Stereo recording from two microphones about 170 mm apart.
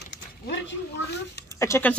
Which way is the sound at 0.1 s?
90° left.